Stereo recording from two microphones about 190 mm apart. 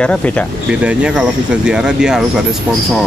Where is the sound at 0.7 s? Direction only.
5° right (ahead or behind).